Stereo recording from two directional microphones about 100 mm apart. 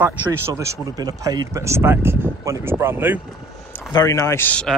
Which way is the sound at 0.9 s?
40° right (ahead or behind).